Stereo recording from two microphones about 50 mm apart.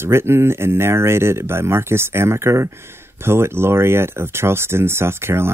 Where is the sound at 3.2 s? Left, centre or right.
Right.